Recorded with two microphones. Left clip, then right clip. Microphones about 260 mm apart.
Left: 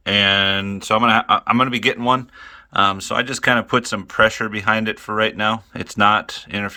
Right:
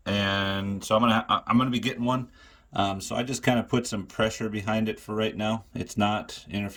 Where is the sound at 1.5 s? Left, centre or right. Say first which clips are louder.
Left 9 dB; centre.